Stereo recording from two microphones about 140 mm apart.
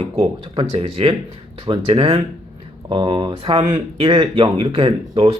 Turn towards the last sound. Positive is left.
turn(degrees=-45)  # may be behind; listen again after turning